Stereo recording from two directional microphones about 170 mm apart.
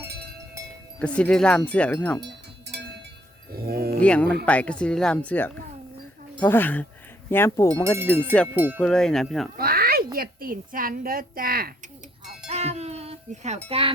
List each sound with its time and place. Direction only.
0.9 s speech: 5° left (ahead or behind)
2.2 s cowbell: 85° right
3.5 s a woman's voice: 65° right (ahead or behind)
4.0 s speech: 5° left (ahead or behind)
8.5 s cowbell: 10° right (ahead or behind)
8.8 s cowbell: 5° left (ahead or behind)
9.6 s a sound: 60° right (ahead or behind)
10.2 s a woman's voice: 55° right (ahead or behind)
12.5 s a sound: 40° right (ahead or behind)
13.7 s speech: 35° right (ahead or behind)